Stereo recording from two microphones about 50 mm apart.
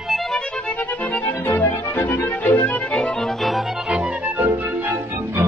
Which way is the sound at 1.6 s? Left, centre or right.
Left.